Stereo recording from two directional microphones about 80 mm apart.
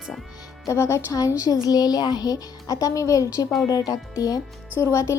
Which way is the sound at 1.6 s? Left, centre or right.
Left.